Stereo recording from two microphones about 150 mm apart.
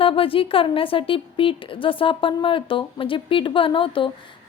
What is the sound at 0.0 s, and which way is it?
A woman's voice, 35° left (ahead or behind).